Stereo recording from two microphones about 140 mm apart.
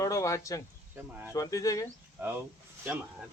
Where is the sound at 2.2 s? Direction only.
15° right (ahead or behind).